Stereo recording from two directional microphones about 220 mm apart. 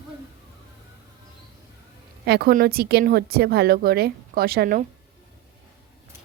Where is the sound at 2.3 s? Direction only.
45° right (ahead or behind).